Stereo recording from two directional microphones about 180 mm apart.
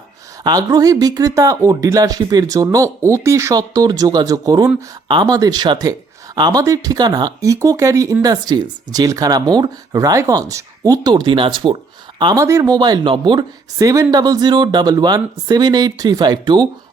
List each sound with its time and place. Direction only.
0.4 s speech: 20° right (ahead or behind)